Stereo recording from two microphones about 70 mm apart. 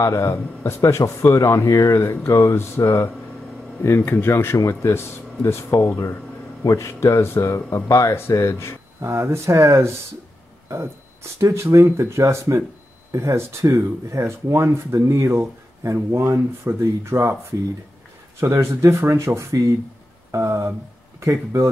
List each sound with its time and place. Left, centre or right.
0.0 s speech: left
9.0 s speech: right
11.3 s speech: right